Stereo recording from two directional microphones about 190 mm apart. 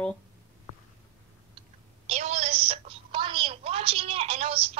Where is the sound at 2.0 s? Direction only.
35° right (ahead or behind).